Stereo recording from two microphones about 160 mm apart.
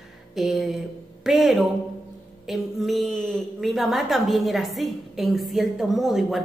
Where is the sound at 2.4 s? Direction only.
Centre (ahead or behind).